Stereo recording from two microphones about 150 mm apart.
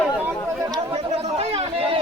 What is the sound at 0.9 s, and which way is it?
Chatter, 40° right (ahead or behind).